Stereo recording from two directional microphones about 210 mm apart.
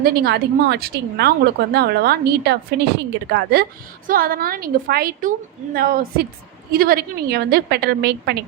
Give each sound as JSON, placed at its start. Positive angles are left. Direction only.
{"t": 0.0, "sound": "a woman's voice", "side_deg": -50}